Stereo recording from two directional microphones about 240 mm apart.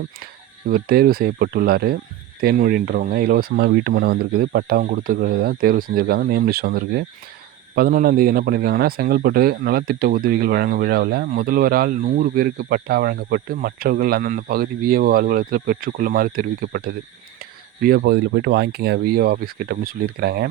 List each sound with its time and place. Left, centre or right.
0.7 s speech: right